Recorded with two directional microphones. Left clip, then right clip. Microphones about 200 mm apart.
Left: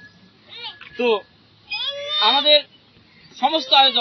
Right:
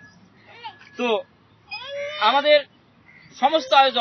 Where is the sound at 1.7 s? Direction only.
40° right (ahead or behind).